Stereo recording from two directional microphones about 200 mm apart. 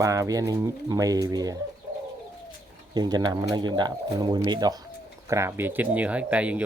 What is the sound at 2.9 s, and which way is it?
Speech, 20° right (ahead or behind).